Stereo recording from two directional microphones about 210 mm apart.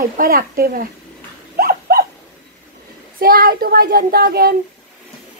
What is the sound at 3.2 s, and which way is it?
A child's voice, 45° right (ahead or behind).